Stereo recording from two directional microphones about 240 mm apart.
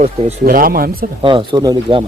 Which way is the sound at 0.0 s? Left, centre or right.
Right.